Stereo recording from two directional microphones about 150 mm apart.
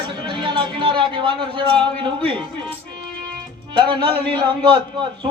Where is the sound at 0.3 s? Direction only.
30° right (ahead or behind).